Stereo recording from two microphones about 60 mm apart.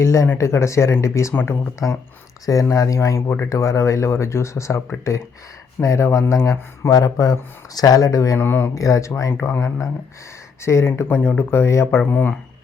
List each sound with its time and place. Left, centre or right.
0.0 s speech: left
1.3 s speech: left
1.8 s speech: left
2.5 s speech: left
8.4 s speech: left
8.7 s speech: left
9.3 s speech: left